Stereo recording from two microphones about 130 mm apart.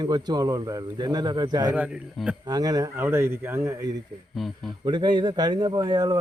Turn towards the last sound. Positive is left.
turn(degrees=-35)  # may be behind; listen again after turning